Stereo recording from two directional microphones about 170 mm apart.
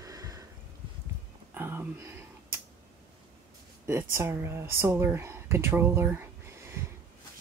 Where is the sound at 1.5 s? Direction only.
10° right (ahead or behind).